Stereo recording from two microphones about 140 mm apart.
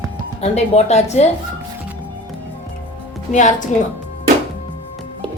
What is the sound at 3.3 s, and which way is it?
Speech, 60° left (ahead or behind).